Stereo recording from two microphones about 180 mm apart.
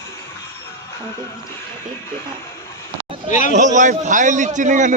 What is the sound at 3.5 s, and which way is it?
A man's voice, 45° right (ahead or behind).